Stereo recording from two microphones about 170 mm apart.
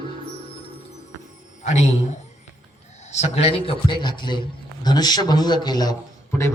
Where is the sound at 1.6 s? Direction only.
45° left (ahead or behind).